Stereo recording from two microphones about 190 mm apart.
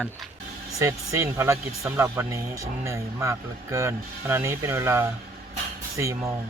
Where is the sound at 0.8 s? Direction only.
15° right (ahead or behind).